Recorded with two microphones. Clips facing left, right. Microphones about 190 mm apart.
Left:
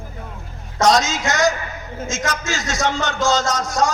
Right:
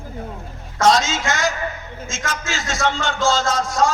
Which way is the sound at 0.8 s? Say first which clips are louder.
Even; 40° left (ahead or behind).